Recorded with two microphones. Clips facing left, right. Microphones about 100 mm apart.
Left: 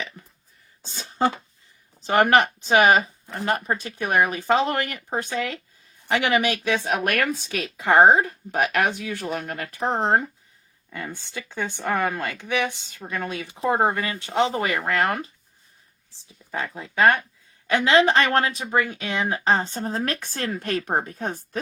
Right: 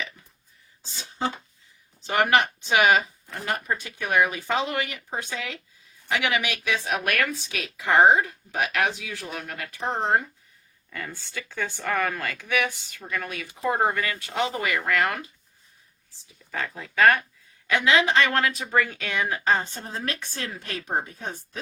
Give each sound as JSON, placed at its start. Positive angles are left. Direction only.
{"t": 0.9, "sound": "a sound", "side_deg": 55}
{"t": 2.0, "sound": "speech", "side_deg": 45}
{"t": 10.8, "sound": "speech", "side_deg": 20}
{"t": 16.5, "sound": "speech", "side_deg": 20}
{"t": 18.3, "sound": "speech", "side_deg": 30}
{"t": 18.6, "sound": "speech", "side_deg": 20}